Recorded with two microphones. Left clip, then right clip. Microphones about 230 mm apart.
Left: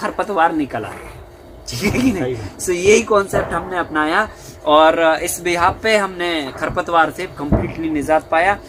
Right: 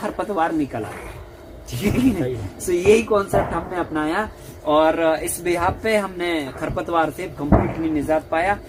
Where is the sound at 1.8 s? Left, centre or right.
Left.